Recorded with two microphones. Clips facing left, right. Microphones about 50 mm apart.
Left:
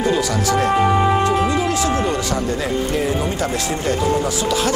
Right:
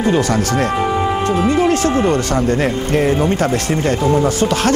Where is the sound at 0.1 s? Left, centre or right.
Right.